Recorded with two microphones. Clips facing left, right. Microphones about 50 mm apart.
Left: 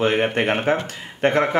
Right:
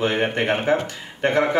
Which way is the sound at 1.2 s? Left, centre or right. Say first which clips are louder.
Left 1 dB; left.